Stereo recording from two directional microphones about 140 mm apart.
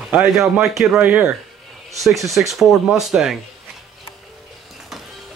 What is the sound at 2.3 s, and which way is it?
A man's voice, centre (ahead or behind).